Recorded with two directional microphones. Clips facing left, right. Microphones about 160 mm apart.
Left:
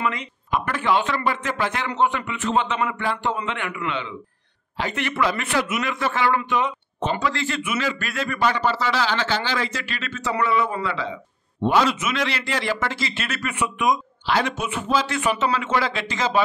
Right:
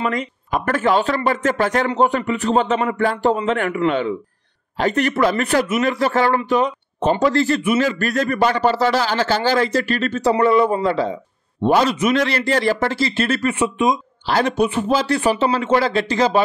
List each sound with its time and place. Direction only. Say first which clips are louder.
0.0 s speech: right 4 dB; 45° right (ahead or behind); by 13.9 s 25° right (ahead or behind)
14.2 s speech: right 7 dB; 40° right (ahead or behind)